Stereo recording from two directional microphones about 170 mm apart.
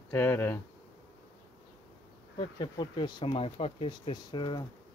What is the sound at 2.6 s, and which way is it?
Speech, 25° left (ahead or behind).